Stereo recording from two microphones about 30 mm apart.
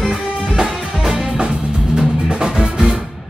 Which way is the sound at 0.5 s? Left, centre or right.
Centre.